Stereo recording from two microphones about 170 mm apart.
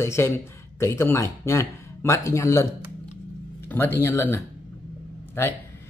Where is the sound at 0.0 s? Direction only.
15° left (ahead or behind).